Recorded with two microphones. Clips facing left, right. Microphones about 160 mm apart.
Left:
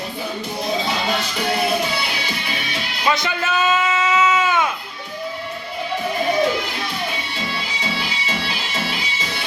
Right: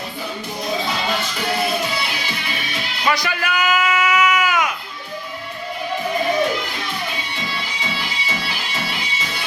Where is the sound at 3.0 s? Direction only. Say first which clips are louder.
Even; 20° left (ahead or behind).